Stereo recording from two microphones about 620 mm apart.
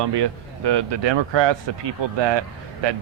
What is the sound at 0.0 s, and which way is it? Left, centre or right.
A man's voice, right.